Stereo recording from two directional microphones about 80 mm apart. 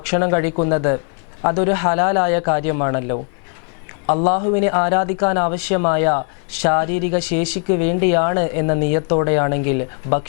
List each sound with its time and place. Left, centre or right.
0.0 s speech: centre